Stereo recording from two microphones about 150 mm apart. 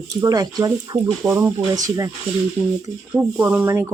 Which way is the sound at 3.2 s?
10° right (ahead or behind).